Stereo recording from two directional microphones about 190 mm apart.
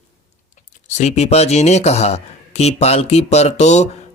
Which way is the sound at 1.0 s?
35° left (ahead or behind).